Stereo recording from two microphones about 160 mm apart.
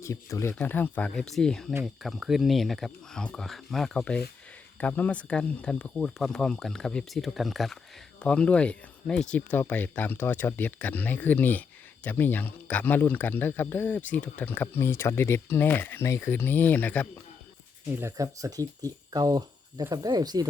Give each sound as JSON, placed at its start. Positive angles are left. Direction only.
{"t": 0.0, "sound": "speech", "side_deg": 20}
{"t": 18.0, "sound": "speech", "side_deg": -20}